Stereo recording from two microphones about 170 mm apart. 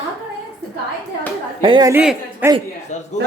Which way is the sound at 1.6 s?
25° right (ahead or behind).